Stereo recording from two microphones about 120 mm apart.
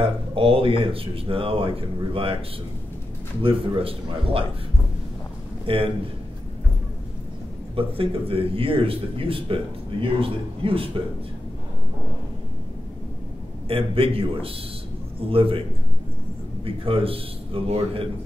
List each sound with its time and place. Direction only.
0.0 s speech: 50° right (ahead or behind)
3.4 s speech: 50° right (ahead or behind)
5.7 s speech: 50° right (ahead or behind)
7.7 s speech: 50° right (ahead or behind)
13.7 s speech: 50° right (ahead or behind)
16.6 s speech: 50° right (ahead or behind)